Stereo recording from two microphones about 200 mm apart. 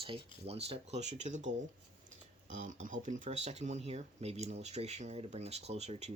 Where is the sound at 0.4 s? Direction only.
30° right (ahead or behind).